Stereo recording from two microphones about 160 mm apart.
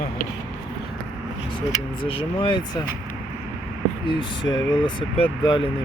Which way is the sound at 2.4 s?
30° left (ahead or behind).